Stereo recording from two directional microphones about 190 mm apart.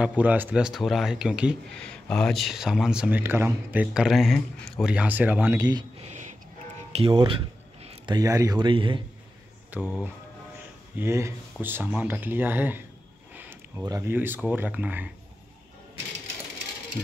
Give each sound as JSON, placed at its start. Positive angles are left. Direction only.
{"t": 0.0, "sound": "speech", "side_deg": -5}
{"t": 7.8, "sound": "a sound", "side_deg": -30}
{"t": 8.2, "sound": "speech", "side_deg": -20}
{"t": 9.7, "sound": "speech", "side_deg": -10}
{"t": 11.0, "sound": "speech", "side_deg": -15}